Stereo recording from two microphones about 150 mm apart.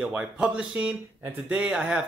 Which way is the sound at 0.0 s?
5° right (ahead or behind).